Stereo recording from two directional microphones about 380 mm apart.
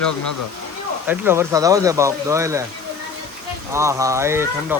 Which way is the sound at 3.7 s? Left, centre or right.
Centre.